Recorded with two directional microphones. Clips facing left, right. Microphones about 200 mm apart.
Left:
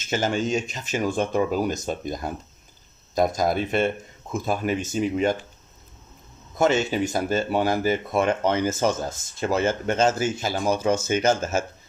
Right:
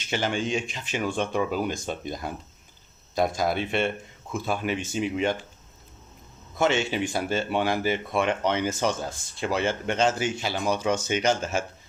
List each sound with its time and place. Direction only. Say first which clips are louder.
0.0 s speech: left 3 dB; 40° left (ahead or behind)
6.6 s speech: left 3 dB; 40° left (ahead or behind)